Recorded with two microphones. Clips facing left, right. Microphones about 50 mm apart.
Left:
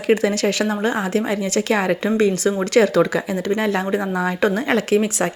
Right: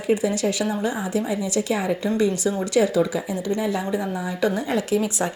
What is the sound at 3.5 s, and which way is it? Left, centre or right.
A woman's voice, left.